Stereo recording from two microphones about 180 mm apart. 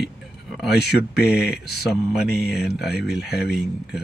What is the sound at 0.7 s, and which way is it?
Speech, 65° left (ahead or behind).